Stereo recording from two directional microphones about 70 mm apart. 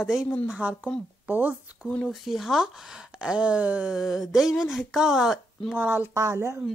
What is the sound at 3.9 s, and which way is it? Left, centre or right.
Speech, centre.